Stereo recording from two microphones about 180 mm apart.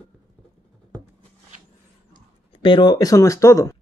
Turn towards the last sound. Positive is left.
turn(degrees=15)  # may be behind; listen again after turning